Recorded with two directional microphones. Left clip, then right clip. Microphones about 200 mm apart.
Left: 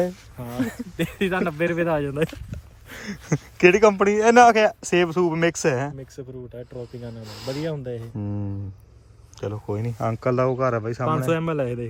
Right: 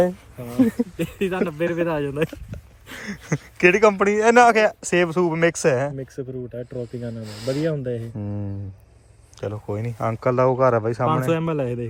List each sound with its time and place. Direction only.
0.9 s speech: centre (ahead or behind)
3.0 s speech: 15° left (ahead or behind)
6.0 s speech: 35° right (ahead or behind)
7.2 s speech: 15° left (ahead or behind)
7.7 s speech: 35° right (ahead or behind)
8.2 s speech: 15° left (ahead or behind)